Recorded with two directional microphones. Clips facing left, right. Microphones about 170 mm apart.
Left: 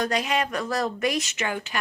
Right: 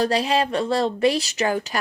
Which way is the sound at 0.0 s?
30° right (ahead or behind).